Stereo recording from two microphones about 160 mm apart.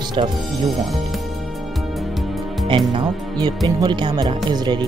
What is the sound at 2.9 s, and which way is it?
Speech, 30° right (ahead or behind).